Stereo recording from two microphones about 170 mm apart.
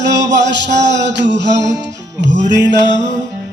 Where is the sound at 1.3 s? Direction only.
90° right.